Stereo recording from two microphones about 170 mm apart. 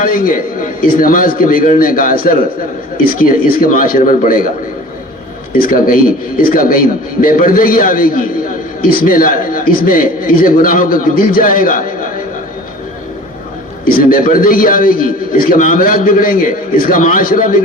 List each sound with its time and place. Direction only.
0.0 s a man's voice: 55° left (ahead or behind)
5.5 s a man's voice: 55° left (ahead or behind)
13.8 s a man's voice: 55° left (ahead or behind)